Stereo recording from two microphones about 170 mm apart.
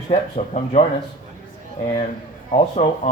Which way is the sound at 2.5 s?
40° left (ahead or behind).